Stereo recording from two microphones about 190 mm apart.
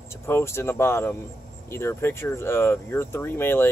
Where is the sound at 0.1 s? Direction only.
15° left (ahead or behind).